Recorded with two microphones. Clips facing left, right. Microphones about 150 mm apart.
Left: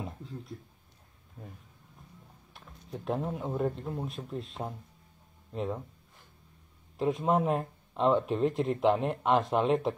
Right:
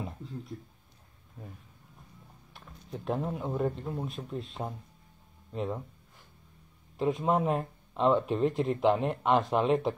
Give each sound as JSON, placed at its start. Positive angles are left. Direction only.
{"t": 2.5, "sound": "a sound", "side_deg": 0}
{"t": 3.7, "sound": "speech", "side_deg": 0}
{"t": 7.0, "sound": "a man's voice", "side_deg": 0}
{"t": 7.2, "sound": "a man's voice", "side_deg": 45}
{"t": 7.9, "sound": "speech", "side_deg": 0}